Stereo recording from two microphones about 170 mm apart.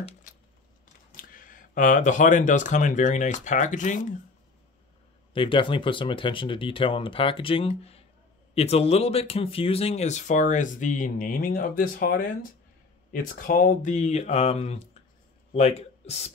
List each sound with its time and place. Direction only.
1.1 s speech: 55° left (ahead or behind)
5.3 s speech: 30° left (ahead or behind)